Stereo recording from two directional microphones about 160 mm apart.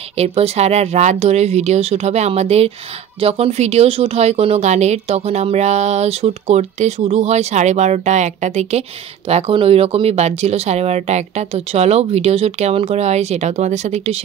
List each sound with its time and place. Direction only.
0.2 s speech: 40° right (ahead or behind)